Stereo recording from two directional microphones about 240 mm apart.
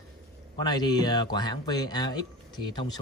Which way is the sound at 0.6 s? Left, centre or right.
Centre.